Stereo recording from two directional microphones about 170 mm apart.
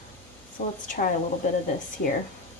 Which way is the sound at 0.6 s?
55° left (ahead or behind).